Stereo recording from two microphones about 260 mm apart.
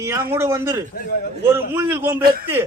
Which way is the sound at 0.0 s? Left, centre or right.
Centre.